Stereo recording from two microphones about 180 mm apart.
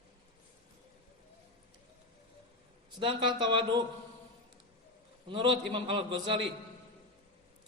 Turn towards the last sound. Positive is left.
turn(degrees=-25)  # may be behind; listen again after turning